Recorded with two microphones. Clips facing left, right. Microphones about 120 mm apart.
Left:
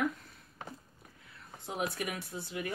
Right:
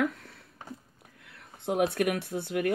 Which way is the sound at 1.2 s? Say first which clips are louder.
Right 11 dB; 65° right (ahead or behind).